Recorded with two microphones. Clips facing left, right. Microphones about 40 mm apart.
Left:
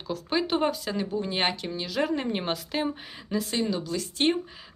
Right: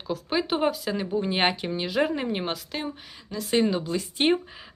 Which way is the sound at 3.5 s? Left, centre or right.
Right.